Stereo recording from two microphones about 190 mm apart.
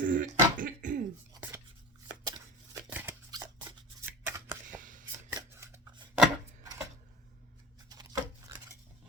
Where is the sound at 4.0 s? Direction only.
10° right (ahead or behind).